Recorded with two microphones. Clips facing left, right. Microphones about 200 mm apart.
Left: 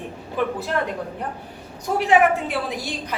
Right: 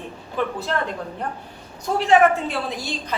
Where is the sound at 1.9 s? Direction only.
15° left (ahead or behind).